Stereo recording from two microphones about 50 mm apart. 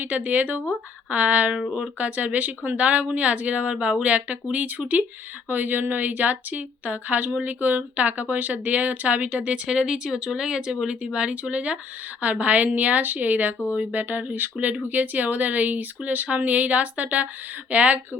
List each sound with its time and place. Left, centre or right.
0.0 s speech: right
9.6 s speech: centre; by 18.0 s right